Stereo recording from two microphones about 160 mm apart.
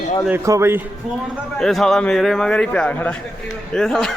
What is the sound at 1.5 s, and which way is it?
A man's voice, 5° left (ahead or behind).